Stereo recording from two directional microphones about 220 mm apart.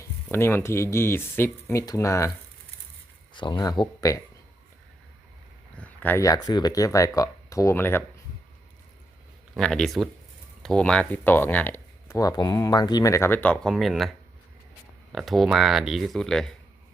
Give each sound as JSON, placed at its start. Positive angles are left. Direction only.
{"t": 0.0, "sound": "speech", "side_deg": 10}
{"t": 3.3, "sound": "speech", "side_deg": 20}
{"t": 5.7, "sound": "speech", "side_deg": 5}
{"t": 9.6, "sound": "speech", "side_deg": 5}